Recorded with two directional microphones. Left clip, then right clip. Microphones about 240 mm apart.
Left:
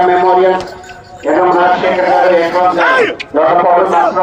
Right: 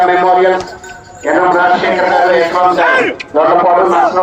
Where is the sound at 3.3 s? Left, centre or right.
Right.